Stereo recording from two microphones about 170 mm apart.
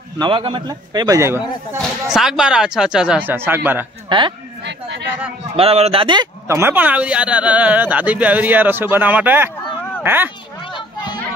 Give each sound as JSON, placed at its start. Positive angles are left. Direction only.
{"t": 0.2, "sound": "a man's voice", "side_deg": -30}
{"t": 1.8, "sound": "speech", "side_deg": -5}
{"t": 4.1, "sound": "a man's voice", "side_deg": -25}
{"t": 4.6, "sound": "chatter", "side_deg": -90}
{"t": 5.6, "sound": "speech", "side_deg": -35}
{"t": 6.4, "sound": "speech", "side_deg": -15}
{"t": 10.6, "sound": "children playing", "side_deg": 30}